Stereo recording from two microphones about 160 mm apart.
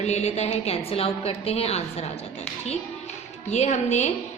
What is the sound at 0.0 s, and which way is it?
A woman's voice, 45° left (ahead or behind).